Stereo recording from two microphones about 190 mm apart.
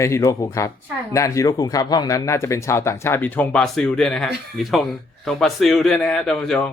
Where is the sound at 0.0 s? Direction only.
15° left (ahead or behind).